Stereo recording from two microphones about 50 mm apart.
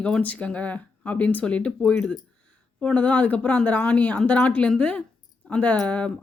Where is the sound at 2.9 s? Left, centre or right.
Left.